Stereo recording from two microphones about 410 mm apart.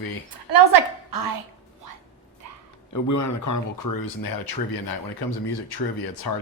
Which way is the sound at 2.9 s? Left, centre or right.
Left.